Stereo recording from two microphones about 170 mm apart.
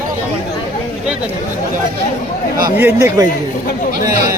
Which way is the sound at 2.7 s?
10° right (ahead or behind).